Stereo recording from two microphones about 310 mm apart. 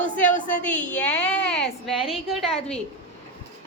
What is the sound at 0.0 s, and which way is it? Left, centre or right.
Speech, left.